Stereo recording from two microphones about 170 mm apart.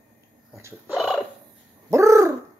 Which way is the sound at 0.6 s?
15° right (ahead or behind).